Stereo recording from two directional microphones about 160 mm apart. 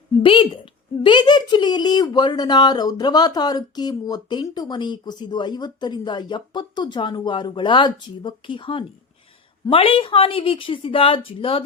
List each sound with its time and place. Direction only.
0.2 s a woman's voice: 30° left (ahead or behind)